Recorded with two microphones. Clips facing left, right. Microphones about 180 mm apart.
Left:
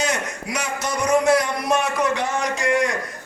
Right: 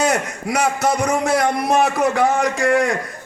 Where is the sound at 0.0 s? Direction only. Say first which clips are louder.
Right 5 dB; 55° right (ahead or behind).